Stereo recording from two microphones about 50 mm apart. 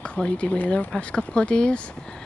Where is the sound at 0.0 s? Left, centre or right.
Left.